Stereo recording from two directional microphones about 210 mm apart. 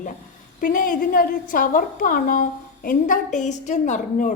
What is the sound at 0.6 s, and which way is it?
A woman's voice, 40° left (ahead or behind).